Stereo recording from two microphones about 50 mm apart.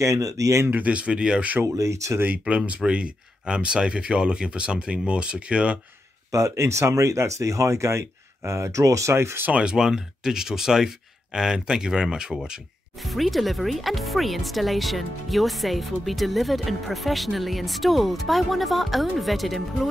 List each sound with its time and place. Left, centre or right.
0.0 s speech: right
0.7 s speech: right
1.8 s speech: right
2.1 s speech: right
2.4 s speech: right
6.3 s speech: right
8.5 s speech: right
9.5 s speech: centre
13.0 s speech: centre